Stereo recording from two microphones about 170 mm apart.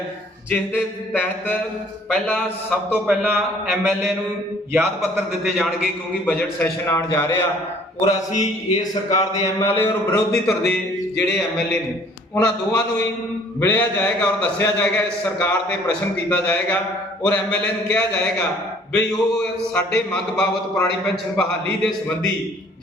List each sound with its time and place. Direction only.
0.5 s a man's voice: 10° left (ahead or behind)
2.9 s a man's voice: 5° right (ahead or behind)
5.5 s a man's voice: 5° left (ahead or behind)
8.0 s a man's voice: 40° left (ahead or behind)
9.6 s a man's voice: 15° left (ahead or behind)
12.3 s a man's voice: 25° left (ahead or behind)
13.6 s a man's voice: 10° left (ahead or behind)